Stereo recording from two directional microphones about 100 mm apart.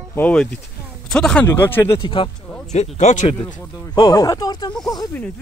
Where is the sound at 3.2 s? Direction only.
90° left.